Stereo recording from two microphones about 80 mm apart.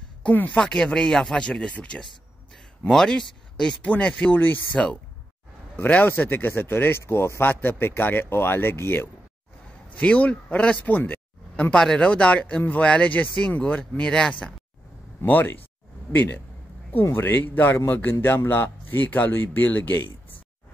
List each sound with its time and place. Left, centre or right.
0.2 s speech: left
0.6 s speech: centre; by 9.1 s left
9.9 s speech: centre
11.7 s speech: centre
15.2 s speech: left